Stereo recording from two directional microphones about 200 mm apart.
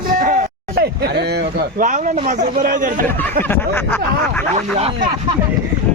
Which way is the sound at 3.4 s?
10° left (ahead or behind).